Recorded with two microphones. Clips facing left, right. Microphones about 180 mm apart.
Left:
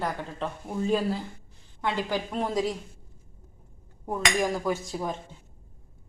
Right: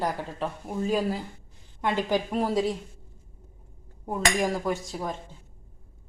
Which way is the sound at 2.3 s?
5° right (ahead or behind).